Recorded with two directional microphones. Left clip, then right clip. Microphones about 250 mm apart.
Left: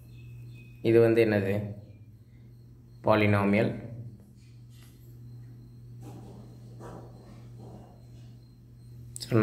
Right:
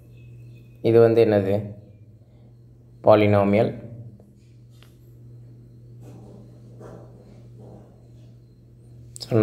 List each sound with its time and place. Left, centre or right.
0.8 s speech: centre
3.0 s speech: centre
9.1 s a sound: centre